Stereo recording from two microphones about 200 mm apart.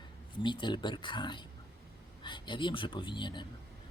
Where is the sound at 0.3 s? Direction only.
25° left (ahead or behind).